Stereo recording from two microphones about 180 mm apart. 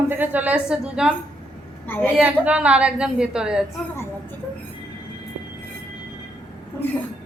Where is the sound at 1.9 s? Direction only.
10° left (ahead or behind).